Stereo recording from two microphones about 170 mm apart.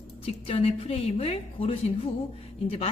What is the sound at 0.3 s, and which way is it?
A woman's voice, 35° left (ahead or behind).